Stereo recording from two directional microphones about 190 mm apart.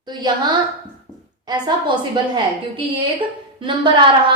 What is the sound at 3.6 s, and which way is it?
Speech, 25° right (ahead or behind).